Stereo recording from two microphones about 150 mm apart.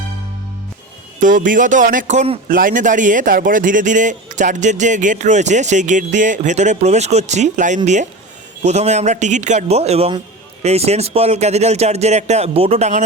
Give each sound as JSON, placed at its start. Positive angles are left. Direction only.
{"t": 1.2, "sound": "a man's voice", "side_deg": -60}
{"t": 2.5, "sound": "a man's voice", "side_deg": -65}